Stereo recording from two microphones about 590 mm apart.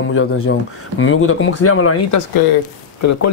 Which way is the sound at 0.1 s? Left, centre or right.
Left.